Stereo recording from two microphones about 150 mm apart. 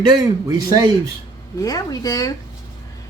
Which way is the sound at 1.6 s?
25° left (ahead or behind).